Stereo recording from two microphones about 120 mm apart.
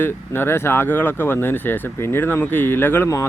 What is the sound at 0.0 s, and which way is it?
Speech, 20° left (ahead or behind).